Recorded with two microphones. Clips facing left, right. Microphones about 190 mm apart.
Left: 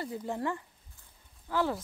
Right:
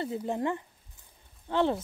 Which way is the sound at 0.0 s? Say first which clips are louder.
Right 4 dB; 20° right (ahead or behind).